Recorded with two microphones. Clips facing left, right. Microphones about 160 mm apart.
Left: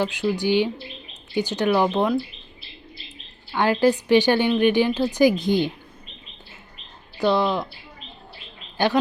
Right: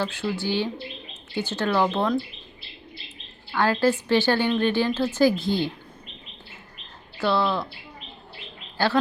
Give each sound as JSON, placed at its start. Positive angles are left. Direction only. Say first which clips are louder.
{"t": 0.0, "sound": "a woman's voice", "louder": "left 4 dB", "side_deg": 15}
{"t": 3.5, "sound": "a woman's voice", "louder": "left 2 dB", "side_deg": 15}
{"t": 7.2, "sound": "a woman's voice", "louder": "left 3 dB", "side_deg": 15}